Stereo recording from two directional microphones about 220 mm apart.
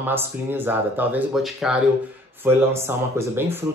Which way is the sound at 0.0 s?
10° right (ahead or behind).